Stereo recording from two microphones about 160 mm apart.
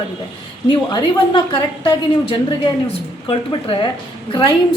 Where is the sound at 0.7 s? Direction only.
30° left (ahead or behind).